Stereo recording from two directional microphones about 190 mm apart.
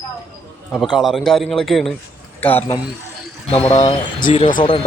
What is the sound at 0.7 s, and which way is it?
A man's voice, centre (ahead or behind).